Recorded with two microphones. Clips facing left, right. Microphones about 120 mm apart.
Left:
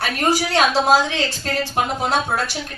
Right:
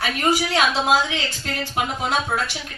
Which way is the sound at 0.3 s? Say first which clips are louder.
Left 2 dB; 35° left (ahead or behind).